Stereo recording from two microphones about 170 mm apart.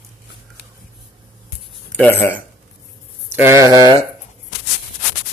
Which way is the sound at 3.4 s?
15° right (ahead or behind).